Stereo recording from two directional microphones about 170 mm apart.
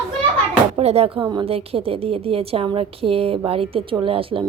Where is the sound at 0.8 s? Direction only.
35° right (ahead or behind).